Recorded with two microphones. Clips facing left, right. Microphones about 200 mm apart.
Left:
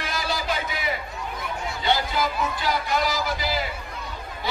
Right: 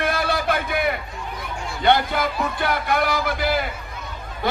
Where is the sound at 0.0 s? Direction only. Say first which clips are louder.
Right 6 dB; 55° right (ahead or behind).